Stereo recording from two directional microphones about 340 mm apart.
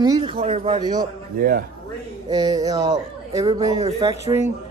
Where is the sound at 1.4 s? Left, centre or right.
Right.